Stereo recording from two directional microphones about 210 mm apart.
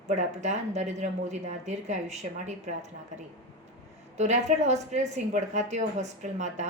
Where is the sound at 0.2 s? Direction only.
35° right (ahead or behind).